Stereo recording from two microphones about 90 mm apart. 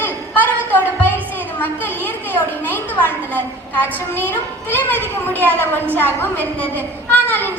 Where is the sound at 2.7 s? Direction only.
20° left (ahead or behind).